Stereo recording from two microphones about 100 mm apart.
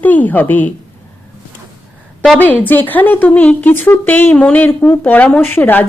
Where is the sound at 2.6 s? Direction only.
20° left (ahead or behind).